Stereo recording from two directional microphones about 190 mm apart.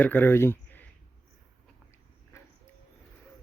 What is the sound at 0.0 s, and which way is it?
Speech, 10° left (ahead or behind).